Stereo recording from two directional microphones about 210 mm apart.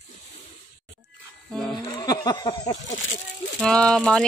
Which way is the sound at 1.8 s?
20° left (ahead or behind).